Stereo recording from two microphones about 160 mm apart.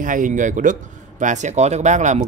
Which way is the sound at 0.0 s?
55° right (ahead or behind).